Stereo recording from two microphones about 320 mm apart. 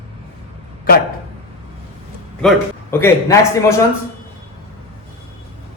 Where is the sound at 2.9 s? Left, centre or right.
Centre.